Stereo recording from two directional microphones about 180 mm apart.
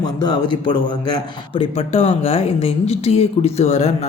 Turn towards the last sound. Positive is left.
turn(degrees=40)  # may be behind; listen again after turning